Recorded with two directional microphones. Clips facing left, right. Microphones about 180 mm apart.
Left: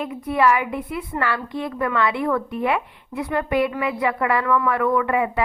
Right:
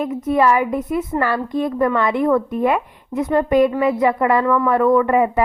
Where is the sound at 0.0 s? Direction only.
45° right (ahead or behind).